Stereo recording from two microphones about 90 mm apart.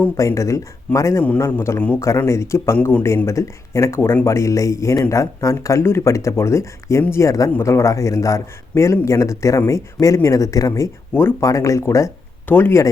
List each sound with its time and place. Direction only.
0.2 s a man's voice: 35° left (ahead or behind)
11.1 s speech: 25° left (ahead or behind)
11.3 s speech: 40° left (ahead or behind)
12.5 s a man's voice: 25° left (ahead or behind)